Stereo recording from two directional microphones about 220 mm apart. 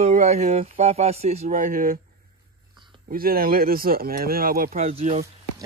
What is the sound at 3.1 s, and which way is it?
Speech, 40° right (ahead or behind).